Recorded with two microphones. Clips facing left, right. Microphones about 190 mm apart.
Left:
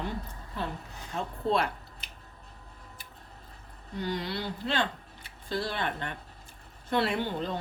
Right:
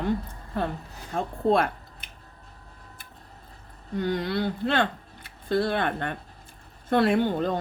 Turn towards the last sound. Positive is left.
turn(degrees=-50)  # may be behind; listen again after turning